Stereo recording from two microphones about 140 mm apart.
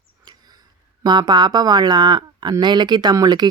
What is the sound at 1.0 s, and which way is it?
Speech, 30° right (ahead or behind).